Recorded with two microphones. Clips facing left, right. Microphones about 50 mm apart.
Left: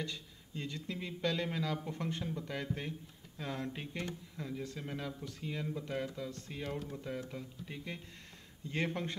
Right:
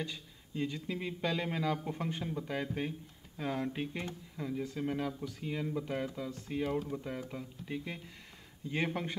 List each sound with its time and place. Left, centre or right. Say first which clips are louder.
0.0 s speech: right 1 dB; centre